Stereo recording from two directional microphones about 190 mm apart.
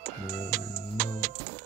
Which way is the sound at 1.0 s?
40° right (ahead or behind).